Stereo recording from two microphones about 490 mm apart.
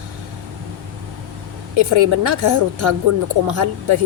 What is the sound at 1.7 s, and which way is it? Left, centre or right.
Speech, right.